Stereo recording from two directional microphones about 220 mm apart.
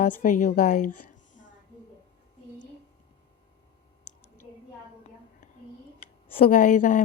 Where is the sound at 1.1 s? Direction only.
35° left (ahead or behind).